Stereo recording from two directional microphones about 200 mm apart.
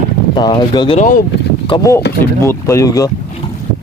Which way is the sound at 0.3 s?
20° left (ahead or behind).